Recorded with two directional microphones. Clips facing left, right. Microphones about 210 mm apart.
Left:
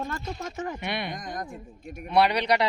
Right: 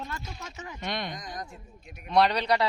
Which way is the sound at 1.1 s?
55° left (ahead or behind).